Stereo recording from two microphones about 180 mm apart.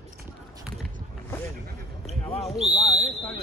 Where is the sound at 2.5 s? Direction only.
40° right (ahead or behind).